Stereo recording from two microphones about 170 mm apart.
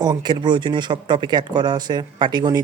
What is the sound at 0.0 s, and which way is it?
Speech, 25° right (ahead or behind).